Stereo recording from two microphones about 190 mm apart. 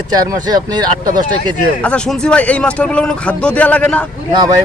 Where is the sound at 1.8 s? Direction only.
5° left (ahead or behind).